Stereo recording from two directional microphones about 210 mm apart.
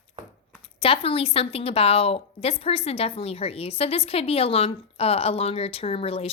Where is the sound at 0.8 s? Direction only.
25° left (ahead or behind).